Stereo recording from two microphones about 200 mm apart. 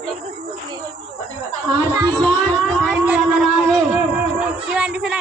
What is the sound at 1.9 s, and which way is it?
Speech, 15° right (ahead or behind).